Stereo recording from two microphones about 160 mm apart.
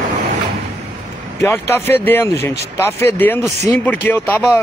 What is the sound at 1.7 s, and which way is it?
Speech, 15° left (ahead or behind).